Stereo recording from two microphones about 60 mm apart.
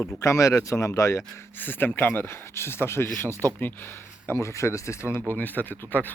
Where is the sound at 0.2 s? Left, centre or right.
Left.